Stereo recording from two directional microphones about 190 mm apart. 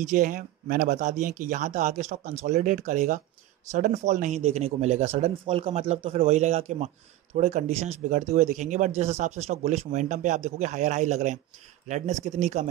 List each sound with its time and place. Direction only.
0.0 s speech: 40° right (ahead or behind)